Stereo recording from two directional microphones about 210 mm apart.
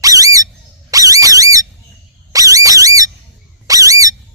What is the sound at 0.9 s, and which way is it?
Alarm, 15° right (ahead or behind).